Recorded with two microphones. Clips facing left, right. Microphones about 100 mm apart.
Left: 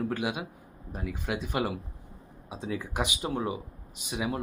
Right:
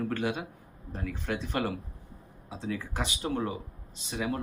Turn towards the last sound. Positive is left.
turn(degrees=15)  # may be behind; listen again after turning